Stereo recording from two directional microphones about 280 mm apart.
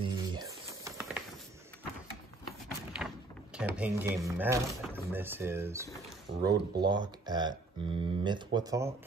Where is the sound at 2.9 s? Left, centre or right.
Centre.